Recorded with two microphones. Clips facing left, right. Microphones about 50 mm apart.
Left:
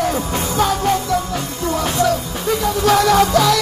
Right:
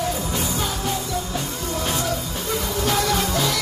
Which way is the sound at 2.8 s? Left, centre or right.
Left.